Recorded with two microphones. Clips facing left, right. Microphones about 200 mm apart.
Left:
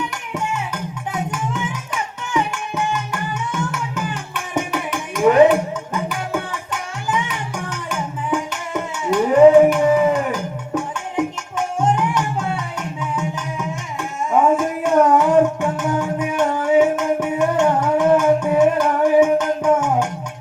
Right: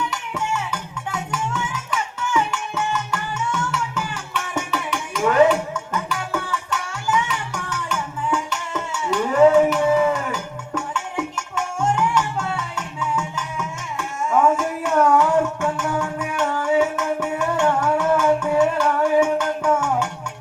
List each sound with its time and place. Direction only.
0.3 s music: 20° left (ahead or behind)
5.1 s music: 20° left (ahead or behind)
9.1 s a sound: 20° left (ahead or behind)
9.8 s music: 15° left (ahead or behind)